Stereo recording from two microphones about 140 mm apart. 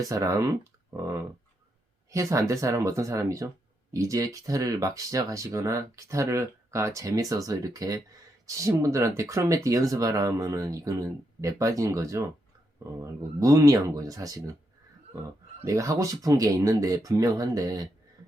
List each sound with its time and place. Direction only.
0.0 s speech: 25° right (ahead or behind)
15.6 s speech: 20° right (ahead or behind)